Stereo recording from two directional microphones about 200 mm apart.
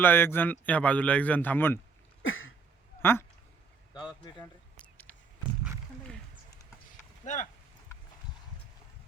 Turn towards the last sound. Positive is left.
turn(degrees=40)  # may be behind; listen again after turning